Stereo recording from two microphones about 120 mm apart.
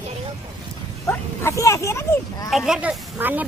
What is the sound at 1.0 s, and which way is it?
Speech, 25° left (ahead or behind).